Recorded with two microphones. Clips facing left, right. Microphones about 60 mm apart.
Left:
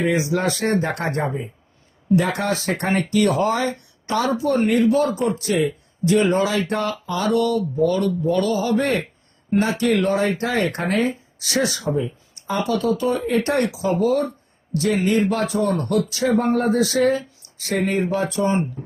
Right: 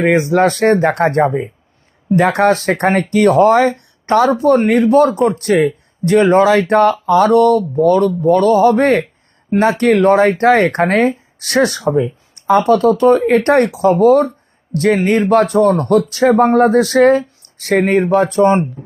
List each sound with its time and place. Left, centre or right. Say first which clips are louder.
0.0 s speech: right 8 dB; right
11.8 s speech: right 8 dB; right